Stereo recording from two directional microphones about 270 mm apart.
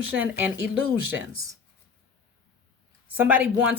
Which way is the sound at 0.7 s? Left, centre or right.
Right.